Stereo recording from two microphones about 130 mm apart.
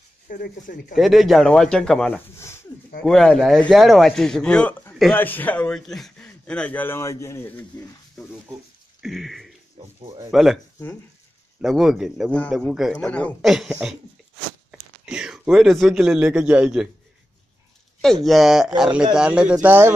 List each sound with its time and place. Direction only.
0.3 s speech: 90° left
0.9 s a man's voice: centre (ahead or behind)
5.8 s a man's voice: centre (ahead or behind); by 7.9 s 15° left (ahead or behind)
9.0 s a man's voice: centre (ahead or behind)
11.6 s a man's voice: 5° right (ahead or behind)
12.3 s a man's voice: 10° left (ahead or behind)
12.7 s a man's voice: 5° right (ahead or behind)
13.0 s a man's voice: 10° left (ahead or behind)
13.4 s a man's voice: 5° right (ahead or behind)
18.0 s a man's voice: centre (ahead or behind); by 19.9 s 15° right (ahead or behind)